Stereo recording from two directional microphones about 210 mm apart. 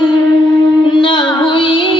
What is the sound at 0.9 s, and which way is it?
Music, 25° left (ahead or behind).